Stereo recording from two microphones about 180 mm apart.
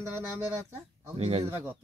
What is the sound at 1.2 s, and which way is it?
Speech, 35° right (ahead or behind).